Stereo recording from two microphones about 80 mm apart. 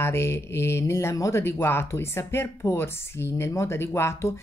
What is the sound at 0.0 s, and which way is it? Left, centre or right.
Speech, left.